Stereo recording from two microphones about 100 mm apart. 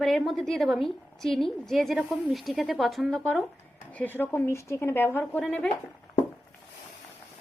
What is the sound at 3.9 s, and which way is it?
A woman's voice, 20° left (ahead or behind).